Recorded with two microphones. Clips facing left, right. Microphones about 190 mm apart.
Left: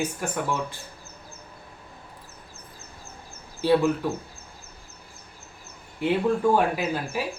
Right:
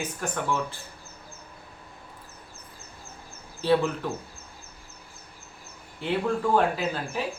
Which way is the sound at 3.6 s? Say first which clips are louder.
Left 3 dB; 15° left (ahead or behind).